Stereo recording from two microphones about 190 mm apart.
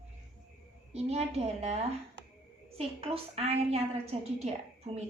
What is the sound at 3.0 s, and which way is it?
A woman's voice, 30° right (ahead or behind).